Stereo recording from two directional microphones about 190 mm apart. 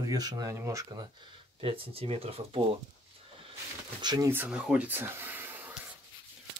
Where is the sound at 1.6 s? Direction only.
30° right (ahead or behind).